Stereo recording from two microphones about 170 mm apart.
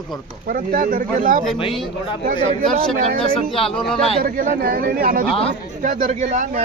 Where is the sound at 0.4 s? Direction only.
55° right (ahead or behind).